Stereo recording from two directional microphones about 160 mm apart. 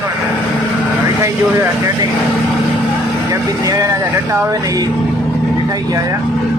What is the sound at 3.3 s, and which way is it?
Speech, 20° right (ahead or behind).